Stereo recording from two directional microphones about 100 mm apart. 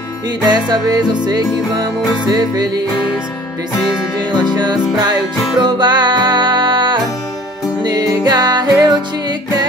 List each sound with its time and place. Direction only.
0.5 s music: 45° right (ahead or behind)
4.4 s music: 45° right (ahead or behind)